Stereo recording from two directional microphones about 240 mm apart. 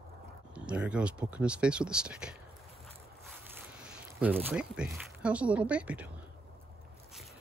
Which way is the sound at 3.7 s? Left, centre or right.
Centre.